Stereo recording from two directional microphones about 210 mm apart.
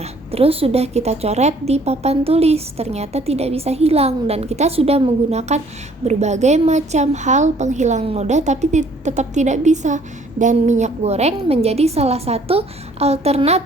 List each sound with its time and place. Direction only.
0.0 s a woman's voice: 30° right (ahead or behind)